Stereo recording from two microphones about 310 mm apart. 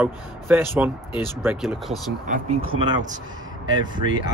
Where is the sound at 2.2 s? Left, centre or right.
Right.